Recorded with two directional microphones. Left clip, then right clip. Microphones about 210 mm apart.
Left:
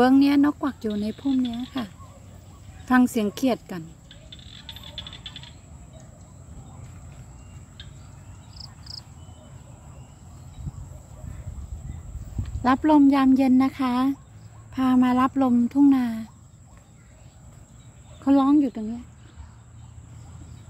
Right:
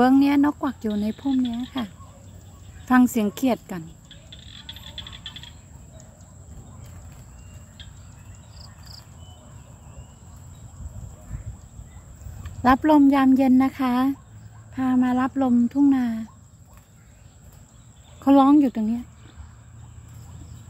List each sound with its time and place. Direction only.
0.0 s speech: centre (ahead or behind)
2.8 s speech: centre (ahead or behind)
4.3 s a sound: 20° left (ahead or behind)
12.4 s speech: 5° right (ahead or behind)
14.8 s speech: 10° left (ahead or behind)
18.2 s speech: 15° right (ahead or behind)